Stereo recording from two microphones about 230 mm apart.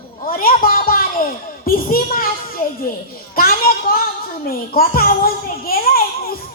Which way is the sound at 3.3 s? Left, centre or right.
Left.